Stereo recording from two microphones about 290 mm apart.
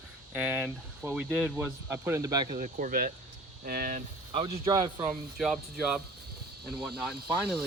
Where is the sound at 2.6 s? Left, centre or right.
Right.